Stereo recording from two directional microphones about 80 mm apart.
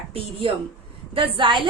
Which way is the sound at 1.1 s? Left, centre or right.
Right.